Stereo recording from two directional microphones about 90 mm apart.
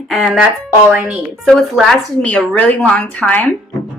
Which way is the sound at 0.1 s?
Centre (ahead or behind).